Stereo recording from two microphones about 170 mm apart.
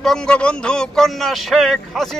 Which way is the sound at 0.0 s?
5° left (ahead or behind).